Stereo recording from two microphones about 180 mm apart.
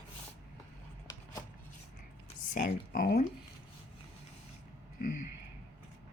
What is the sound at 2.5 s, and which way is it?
Speech, 50° left (ahead or behind).